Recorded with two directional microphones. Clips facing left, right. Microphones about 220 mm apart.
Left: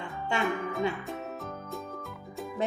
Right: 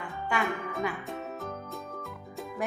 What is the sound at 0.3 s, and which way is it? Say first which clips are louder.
Music: even; 25° left (ahead or behind).